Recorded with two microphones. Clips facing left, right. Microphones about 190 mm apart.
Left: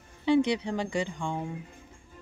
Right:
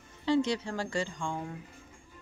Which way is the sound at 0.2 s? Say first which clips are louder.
Left 4 dB; 15° left (ahead or behind).